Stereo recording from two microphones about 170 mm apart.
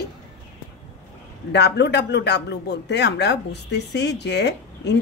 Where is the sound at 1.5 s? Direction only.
85° left.